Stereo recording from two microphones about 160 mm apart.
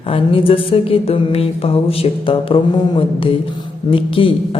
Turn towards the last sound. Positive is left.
turn(degrees=35)  # may be behind; listen again after turning